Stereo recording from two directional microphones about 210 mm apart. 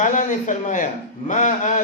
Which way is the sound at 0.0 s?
35° left (ahead or behind).